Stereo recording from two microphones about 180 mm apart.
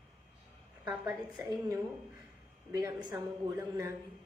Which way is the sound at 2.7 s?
20° right (ahead or behind).